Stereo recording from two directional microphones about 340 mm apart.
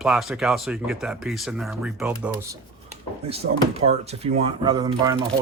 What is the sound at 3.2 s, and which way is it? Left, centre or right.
Speech, centre.